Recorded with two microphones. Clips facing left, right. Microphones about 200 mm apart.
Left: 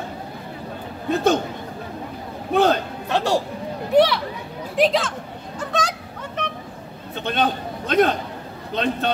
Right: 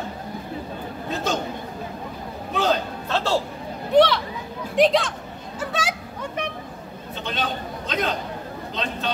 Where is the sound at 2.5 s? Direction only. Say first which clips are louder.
Left 5 dB; 55° left (ahead or behind).